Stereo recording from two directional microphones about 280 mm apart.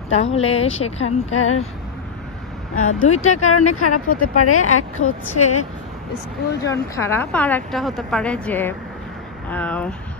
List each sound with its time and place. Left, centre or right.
0.1 s speech: left
0.9 s a woman's voice: left
2.7 s a woman's voice: left
6.6 s a woman's voice: centre